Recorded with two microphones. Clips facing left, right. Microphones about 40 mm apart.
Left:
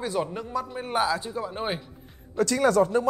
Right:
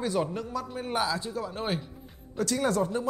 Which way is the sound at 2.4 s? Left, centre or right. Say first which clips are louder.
Left 6 dB; left.